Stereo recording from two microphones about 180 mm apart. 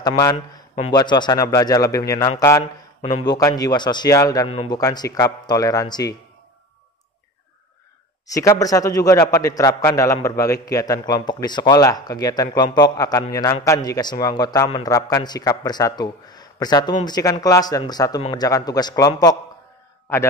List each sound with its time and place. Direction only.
0.0 s a man's voice: 20° left (ahead or behind)
4.5 s speech: 35° left (ahead or behind)
4.7 s a man's voice: 20° left (ahead or behind)
8.3 s a man's voice: 20° left (ahead or behind)